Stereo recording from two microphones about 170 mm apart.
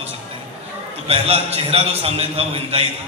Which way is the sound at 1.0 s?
35° right (ahead or behind).